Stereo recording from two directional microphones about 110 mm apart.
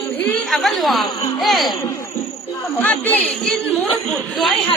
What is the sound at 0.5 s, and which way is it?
Music, centre (ahead or behind).